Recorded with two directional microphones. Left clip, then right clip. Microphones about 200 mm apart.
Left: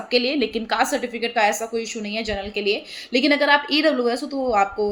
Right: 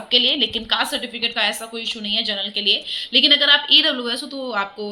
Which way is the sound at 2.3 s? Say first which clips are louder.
Right 1 dB; 5° left (ahead or behind).